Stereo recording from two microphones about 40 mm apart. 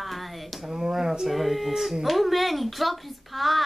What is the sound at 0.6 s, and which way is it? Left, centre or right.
Speech, centre.